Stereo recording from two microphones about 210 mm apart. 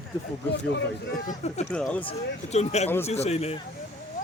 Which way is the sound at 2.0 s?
30° left (ahead or behind).